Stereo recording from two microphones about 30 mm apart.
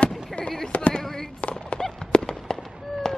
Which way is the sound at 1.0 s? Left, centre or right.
Centre.